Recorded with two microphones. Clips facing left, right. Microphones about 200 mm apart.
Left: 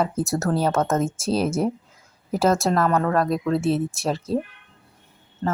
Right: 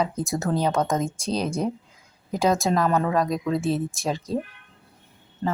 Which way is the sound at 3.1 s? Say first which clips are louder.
Left 2 dB; centre (ahead or behind).